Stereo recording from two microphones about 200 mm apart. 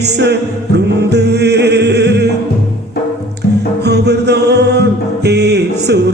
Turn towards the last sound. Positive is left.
turn(degrees=-55)  # may be behind; listen again after turning